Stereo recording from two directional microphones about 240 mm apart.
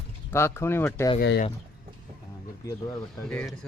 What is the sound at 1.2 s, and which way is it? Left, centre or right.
Speech, left.